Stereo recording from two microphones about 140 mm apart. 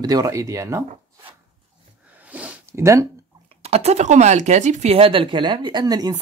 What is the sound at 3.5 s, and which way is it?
Speech, 45° right (ahead or behind).